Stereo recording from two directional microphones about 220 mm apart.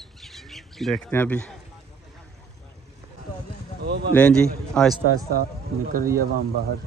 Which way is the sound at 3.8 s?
50° right (ahead or behind).